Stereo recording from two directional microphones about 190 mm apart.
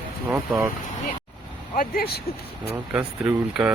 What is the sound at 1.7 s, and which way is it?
Speech, 45° left (ahead or behind).